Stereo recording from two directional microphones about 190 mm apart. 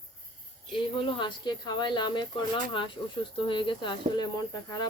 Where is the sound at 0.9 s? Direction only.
25° left (ahead or behind).